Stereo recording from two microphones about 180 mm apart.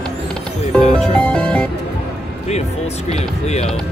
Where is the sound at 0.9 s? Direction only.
5° left (ahead or behind).